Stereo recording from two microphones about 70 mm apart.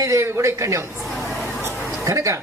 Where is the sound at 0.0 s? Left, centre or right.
Right.